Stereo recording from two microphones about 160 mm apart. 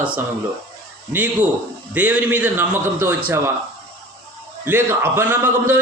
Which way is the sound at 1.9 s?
10° right (ahead or behind).